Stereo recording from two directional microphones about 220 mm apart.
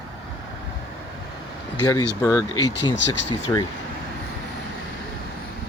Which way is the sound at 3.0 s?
90° left.